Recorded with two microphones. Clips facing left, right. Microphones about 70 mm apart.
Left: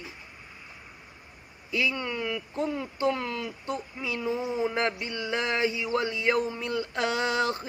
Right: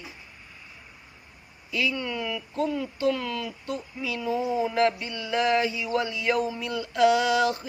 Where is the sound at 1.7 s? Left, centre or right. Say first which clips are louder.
Right 1 dB; left.